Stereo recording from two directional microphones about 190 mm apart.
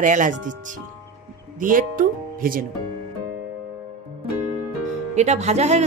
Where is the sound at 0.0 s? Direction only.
40° right (ahead or behind).